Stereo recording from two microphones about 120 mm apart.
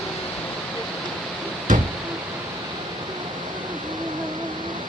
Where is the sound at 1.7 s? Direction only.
90° right.